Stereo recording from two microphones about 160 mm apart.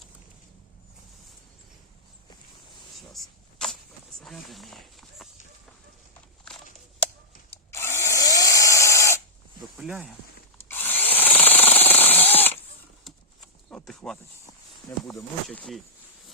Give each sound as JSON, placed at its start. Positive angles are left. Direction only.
{"t": 3.0, "sound": "a sound", "side_deg": 0}
{"t": 4.2, "sound": "speech", "side_deg": 0}
{"t": 7.7, "sound": "tools", "side_deg": 15}
{"t": 9.7, "sound": "speech", "side_deg": -5}
{"t": 10.7, "sound": "drill", "side_deg": 15}
{"t": 11.2, "sound": "jackhammer", "side_deg": 10}
{"t": 13.7, "sound": "speech", "side_deg": 5}
{"t": 14.9, "sound": "speech", "side_deg": 15}
{"t": 15.5, "sound": "speech", "side_deg": 0}